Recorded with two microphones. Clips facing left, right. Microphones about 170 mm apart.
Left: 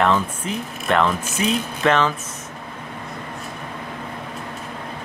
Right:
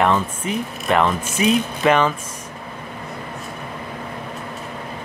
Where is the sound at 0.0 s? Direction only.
10° right (ahead or behind).